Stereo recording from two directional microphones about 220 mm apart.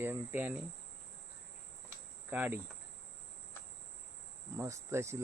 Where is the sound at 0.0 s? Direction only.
10° right (ahead or behind).